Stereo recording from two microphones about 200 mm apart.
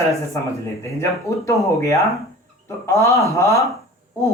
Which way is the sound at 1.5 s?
15° left (ahead or behind).